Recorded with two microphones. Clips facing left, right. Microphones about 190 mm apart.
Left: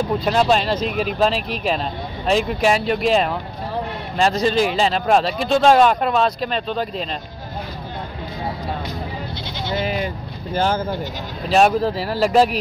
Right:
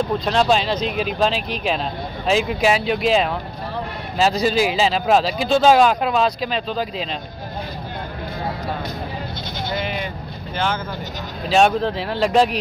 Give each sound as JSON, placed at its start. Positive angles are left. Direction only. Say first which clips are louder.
{"t": 0.2, "sound": "speech", "louder": "left 2 dB", "side_deg": 5}
{"t": 10.5, "sound": "speech", "louder": "left 4 dB", "side_deg": 40}
{"t": 11.4, "sound": "speech", "louder": "left 1 dB", "side_deg": 0}